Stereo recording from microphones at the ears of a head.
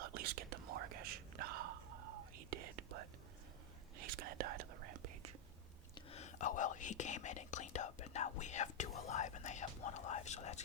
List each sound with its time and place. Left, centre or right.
0.0 s whispering: right
6.1 s whispering: left